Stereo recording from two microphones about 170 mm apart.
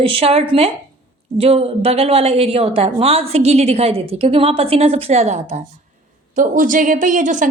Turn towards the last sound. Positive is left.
turn(degrees=-45)  # may be behind; listen again after turning